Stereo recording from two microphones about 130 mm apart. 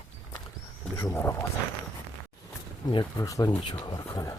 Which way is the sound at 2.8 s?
30° left (ahead or behind).